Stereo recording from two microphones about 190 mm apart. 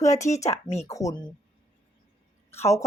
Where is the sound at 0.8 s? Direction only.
15° left (ahead or behind).